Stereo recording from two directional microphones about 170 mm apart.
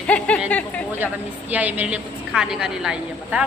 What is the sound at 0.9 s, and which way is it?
A woman's voice, 10° right (ahead or behind).